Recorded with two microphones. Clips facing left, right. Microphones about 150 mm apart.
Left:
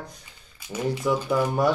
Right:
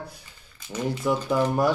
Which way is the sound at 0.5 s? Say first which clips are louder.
Even; 10° left (ahead or behind).